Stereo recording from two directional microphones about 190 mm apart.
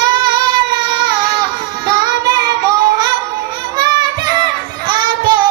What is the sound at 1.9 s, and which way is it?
Child singing, 20° right (ahead or behind).